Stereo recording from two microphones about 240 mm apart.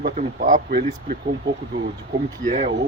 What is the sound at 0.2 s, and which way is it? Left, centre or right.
Speech, right.